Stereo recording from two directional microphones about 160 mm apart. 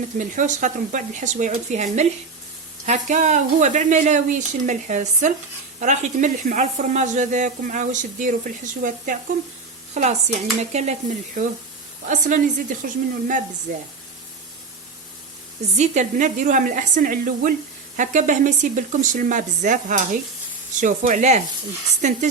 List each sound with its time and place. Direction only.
0.2 s a woman's voice: 50° right (ahead or behind)
15.8 s a woman's voice: 50° right (ahead or behind)